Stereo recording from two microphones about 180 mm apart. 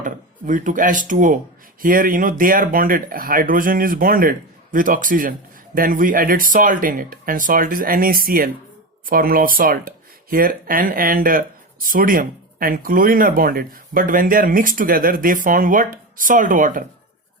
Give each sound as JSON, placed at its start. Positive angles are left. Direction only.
{"t": 0.0, "sound": "speech", "side_deg": -45}